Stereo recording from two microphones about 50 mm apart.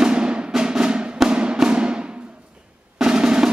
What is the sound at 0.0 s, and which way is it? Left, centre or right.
Music, centre.